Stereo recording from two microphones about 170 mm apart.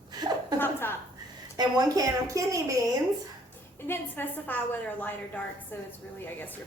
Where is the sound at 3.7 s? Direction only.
15° left (ahead or behind).